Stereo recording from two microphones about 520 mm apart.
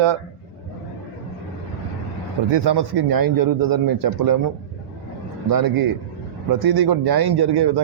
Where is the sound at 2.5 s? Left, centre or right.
Right.